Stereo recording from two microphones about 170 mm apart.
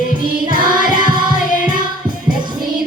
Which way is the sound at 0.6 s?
55° left (ahead or behind).